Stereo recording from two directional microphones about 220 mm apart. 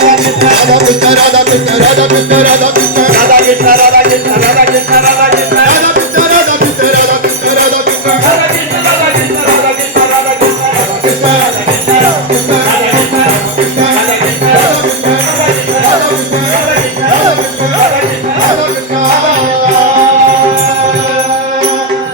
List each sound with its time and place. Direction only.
0.3 s music: 45° right (ahead or behind)
2.0 s music: 30° right (ahead or behind)